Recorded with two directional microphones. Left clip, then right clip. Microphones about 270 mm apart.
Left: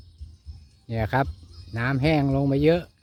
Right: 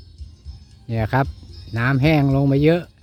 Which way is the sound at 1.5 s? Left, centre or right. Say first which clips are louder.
Right 7 dB; right.